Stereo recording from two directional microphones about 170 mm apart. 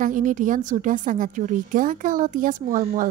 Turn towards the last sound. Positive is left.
turn(degrees=-50)  # may be behind; listen again after turning